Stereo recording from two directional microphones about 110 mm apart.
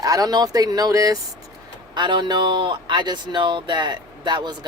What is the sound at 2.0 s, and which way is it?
Speech, 45° right (ahead or behind).